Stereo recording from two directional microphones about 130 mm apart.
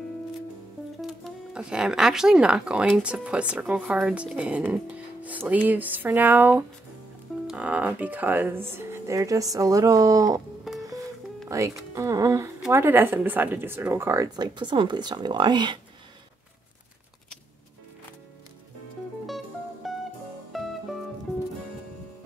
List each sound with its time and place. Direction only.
1.0 s speech: 5° right (ahead or behind); by 10.4 s 25° right (ahead or behind)
11.4 s speech: 25° right (ahead or behind)
19.2 s music: centre (ahead or behind)